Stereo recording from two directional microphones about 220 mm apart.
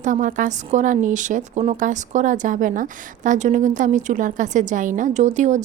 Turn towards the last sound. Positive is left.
turn(degrees=-35)  # may be behind; listen again after turning